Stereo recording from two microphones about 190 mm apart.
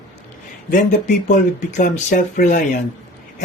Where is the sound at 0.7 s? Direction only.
40° left (ahead or behind).